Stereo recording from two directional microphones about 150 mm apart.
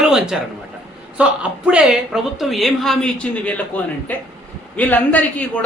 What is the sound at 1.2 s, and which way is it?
A woman's voice, 10° right (ahead or behind).